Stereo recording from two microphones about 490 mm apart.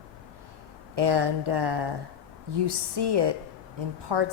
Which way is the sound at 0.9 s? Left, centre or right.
Right.